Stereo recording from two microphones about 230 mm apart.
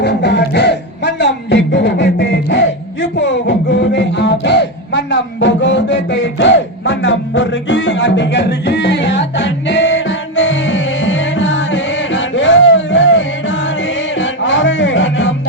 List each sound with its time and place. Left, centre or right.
0.0 s music: left